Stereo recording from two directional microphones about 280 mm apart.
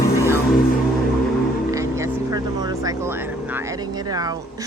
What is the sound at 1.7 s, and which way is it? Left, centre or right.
Vehicle, centre.